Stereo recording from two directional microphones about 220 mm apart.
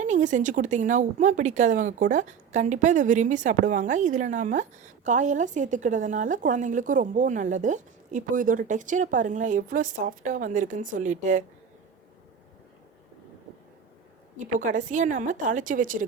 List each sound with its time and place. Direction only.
0.0 s a woman's voice: 35° right (ahead or behind)
14.3 s a woman's voice: 35° right (ahead or behind)